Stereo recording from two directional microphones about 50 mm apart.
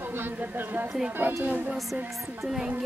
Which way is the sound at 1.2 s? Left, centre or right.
Right.